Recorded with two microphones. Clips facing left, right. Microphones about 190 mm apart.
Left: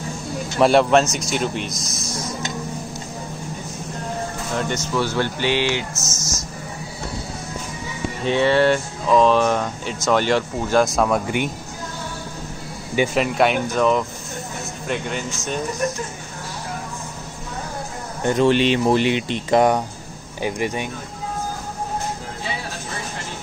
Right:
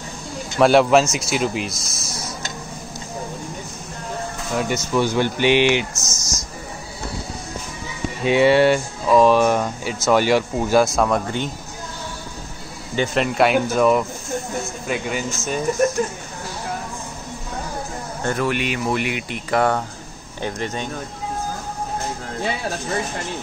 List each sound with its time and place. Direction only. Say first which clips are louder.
0.6 s speech: right 1 dB; centre (ahead or behind)
4.6 s speech: right 3 dB; 10° right (ahead or behind)
8.3 s speech: right 2 dB; 10° right (ahead or behind)
11.2 s speech: left 2 dB; 15° left (ahead or behind)
12.9 s speech: left 1 dB; 10° left (ahead or behind)
18.2 s speech: left 6 dB; 20° left (ahead or behind)